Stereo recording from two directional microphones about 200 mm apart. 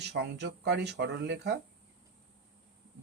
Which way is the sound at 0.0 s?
55° right (ahead or behind).